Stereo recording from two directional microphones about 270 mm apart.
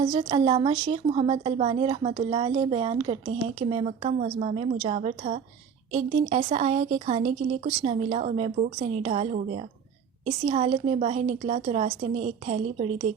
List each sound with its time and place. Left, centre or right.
0.0 s a woman's voice: right